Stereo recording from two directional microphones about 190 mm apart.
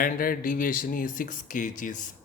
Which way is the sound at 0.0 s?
50° left (ahead or behind).